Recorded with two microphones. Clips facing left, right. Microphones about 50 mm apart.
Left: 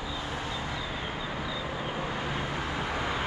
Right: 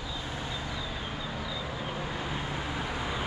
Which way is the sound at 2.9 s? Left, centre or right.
Left.